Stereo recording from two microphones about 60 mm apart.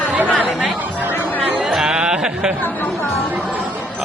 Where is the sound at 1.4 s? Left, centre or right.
Centre.